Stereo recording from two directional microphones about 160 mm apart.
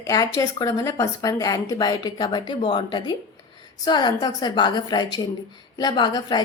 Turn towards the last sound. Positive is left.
turn(degrees=25)  # may be behind; listen again after turning